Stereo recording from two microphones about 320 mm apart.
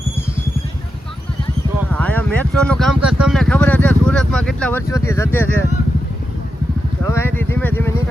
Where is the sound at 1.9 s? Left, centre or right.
Centre.